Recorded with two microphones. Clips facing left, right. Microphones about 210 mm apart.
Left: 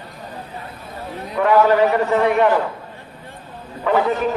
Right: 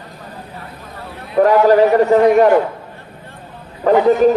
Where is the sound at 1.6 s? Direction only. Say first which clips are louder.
Right 5 dB; 40° right (ahead or behind).